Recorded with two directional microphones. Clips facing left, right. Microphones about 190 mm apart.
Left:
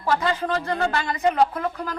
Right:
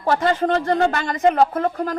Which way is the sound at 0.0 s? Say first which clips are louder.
Right 4 dB; 45° right (ahead or behind).